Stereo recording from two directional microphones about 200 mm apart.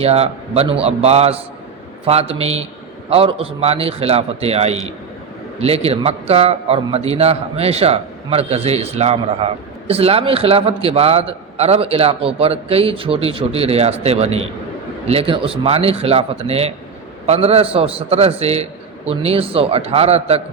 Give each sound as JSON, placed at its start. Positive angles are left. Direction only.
{"t": 0.0, "sound": "a man's voice", "side_deg": -30}